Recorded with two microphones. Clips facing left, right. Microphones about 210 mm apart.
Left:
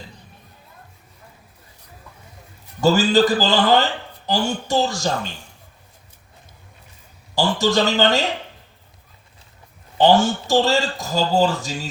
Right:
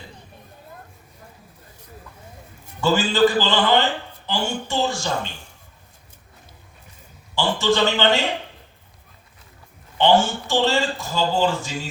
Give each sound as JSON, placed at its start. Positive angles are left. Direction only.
{"t": 2.8, "sound": "speech", "side_deg": 40}
{"t": 7.3, "sound": "speech", "side_deg": 40}
{"t": 10.0, "sound": "speech", "side_deg": 40}